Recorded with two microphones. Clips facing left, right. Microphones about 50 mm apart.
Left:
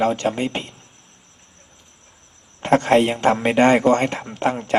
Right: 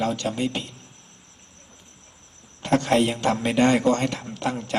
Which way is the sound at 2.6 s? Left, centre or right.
Left.